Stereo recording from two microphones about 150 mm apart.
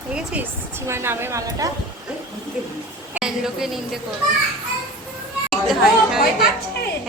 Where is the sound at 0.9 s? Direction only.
15° right (ahead or behind).